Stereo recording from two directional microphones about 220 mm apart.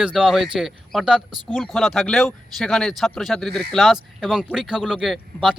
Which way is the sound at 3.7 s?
Centre (ahead or behind).